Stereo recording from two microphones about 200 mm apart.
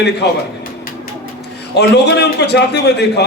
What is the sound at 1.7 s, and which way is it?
A man's voice, 55° left (ahead or behind).